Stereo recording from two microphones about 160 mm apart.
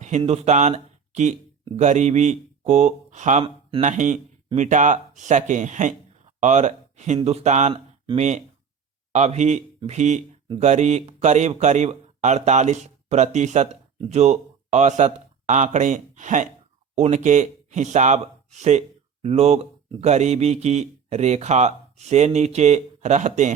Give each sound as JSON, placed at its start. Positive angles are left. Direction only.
{"t": 0.2, "sound": "speech", "side_deg": -45}
{"t": 7.7, "sound": "a sound", "side_deg": -30}
{"t": 8.2, "sound": "speech", "side_deg": -45}